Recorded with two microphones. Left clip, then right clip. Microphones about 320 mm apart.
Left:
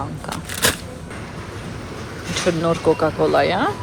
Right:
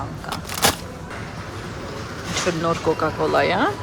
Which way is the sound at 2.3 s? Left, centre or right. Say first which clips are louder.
Left 2 dB; centre.